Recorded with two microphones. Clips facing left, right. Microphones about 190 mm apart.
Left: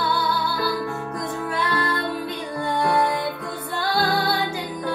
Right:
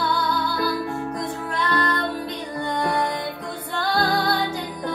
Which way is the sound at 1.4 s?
10° left (ahead or behind).